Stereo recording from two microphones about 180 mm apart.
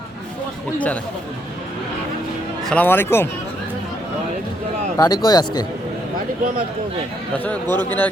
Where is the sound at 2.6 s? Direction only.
10° left (ahead or behind).